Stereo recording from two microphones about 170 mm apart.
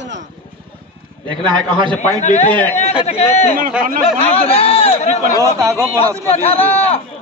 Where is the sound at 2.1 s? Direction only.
45° left (ahead or behind).